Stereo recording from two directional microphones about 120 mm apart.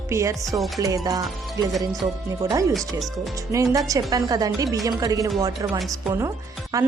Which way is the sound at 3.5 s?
30° right (ahead or behind).